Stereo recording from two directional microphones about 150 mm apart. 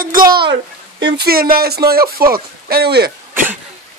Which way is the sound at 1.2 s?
80° right.